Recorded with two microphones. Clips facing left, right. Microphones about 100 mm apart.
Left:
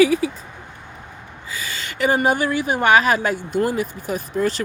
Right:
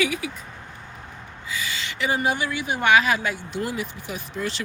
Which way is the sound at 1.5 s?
40° left (ahead or behind).